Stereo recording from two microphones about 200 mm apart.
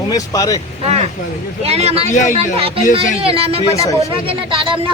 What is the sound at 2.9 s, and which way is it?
A man's voice, 30° right (ahead or behind).